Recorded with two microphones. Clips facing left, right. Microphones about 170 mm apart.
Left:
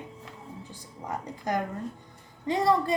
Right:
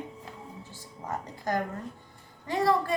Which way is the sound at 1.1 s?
20° left (ahead or behind).